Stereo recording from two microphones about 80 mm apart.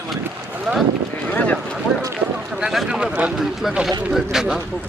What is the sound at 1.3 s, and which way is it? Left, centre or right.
Speech, centre.